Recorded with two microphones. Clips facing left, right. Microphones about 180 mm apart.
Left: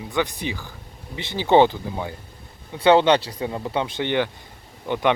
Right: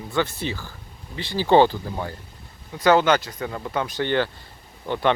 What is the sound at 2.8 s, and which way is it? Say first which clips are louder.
Speech: left 2 dB; 30° left (ahead or behind).